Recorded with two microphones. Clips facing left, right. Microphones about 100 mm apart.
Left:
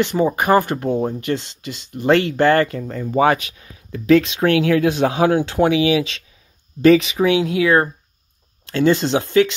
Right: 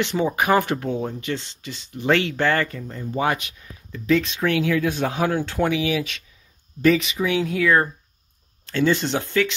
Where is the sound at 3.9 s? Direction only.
55° left (ahead or behind); by 5.4 s 75° left (ahead or behind).